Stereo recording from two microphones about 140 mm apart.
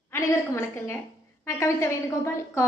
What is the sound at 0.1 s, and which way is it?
A woman's voice, 20° left (ahead or behind).